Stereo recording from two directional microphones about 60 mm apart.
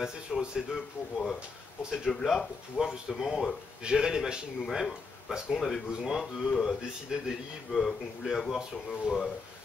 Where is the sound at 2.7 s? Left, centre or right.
Centre.